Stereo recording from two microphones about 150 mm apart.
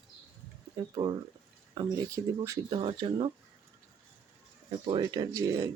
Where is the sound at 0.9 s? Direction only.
30° right (ahead or behind).